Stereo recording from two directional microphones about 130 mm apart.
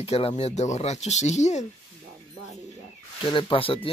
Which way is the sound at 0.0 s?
50° left (ahead or behind).